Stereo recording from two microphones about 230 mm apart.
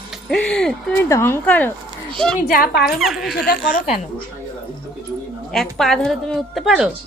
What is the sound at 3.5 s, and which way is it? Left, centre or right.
Speech, left.